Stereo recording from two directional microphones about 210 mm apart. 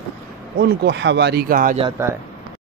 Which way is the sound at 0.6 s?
55° right (ahead or behind).